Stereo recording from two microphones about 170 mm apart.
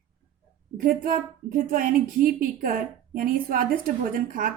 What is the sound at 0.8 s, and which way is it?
A woman's voice, 50° right (ahead or behind).